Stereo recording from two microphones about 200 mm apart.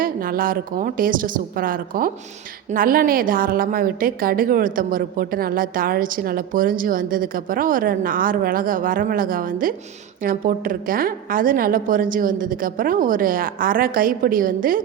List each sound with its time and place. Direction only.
0.0 s a woman's voice: 45° right (ahead or behind)